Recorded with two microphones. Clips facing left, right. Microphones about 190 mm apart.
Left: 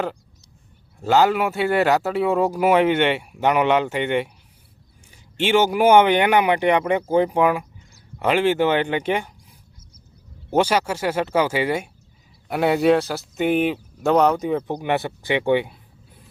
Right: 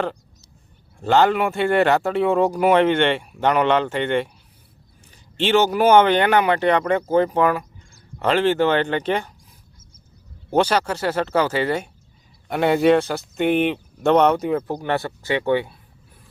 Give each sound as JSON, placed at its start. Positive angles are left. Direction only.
{"t": 0.9, "sound": "speech", "side_deg": 5}
{"t": 10.5, "sound": "speech", "side_deg": 10}
{"t": 14.8, "sound": "speech", "side_deg": 15}